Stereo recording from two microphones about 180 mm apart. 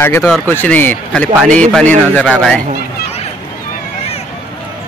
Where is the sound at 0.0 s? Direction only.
15° left (ahead or behind).